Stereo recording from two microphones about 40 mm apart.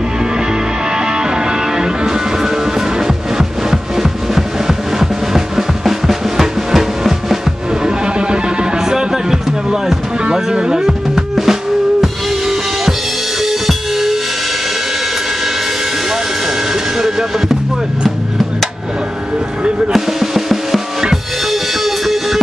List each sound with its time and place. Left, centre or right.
0.9 s music: centre
7.8 s music: right
11.1 s drum: centre
12.0 s drum kit: centre
13.4 s music: centre
19.9 s music: centre